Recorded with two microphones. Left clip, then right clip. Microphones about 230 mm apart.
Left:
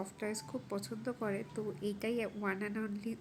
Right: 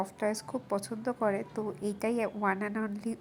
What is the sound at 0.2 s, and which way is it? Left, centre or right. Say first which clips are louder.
A woman's voice: right 7 dB; centre.